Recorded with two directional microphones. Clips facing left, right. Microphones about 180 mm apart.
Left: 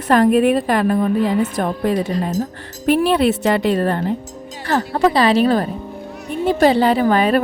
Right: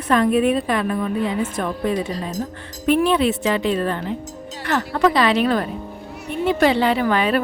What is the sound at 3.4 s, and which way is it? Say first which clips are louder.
Speech: left 4 dB; 55° left (ahead or behind).